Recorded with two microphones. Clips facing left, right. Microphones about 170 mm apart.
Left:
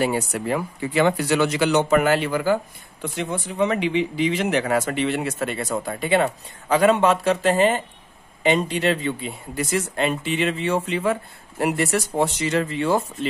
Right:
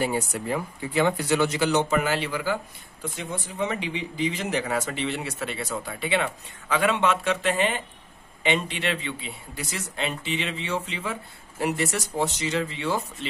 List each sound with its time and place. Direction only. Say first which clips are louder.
0.0 s speech: left 4 dB; 75° left (ahead or behind); by 2.6 s 50° left (ahead or behind)
3.0 s speech: left 6 dB; 70° left (ahead or behind); by 13.3 s 50° left (ahead or behind)